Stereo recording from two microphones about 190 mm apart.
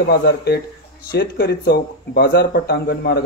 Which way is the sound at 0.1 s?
55° left (ahead or behind).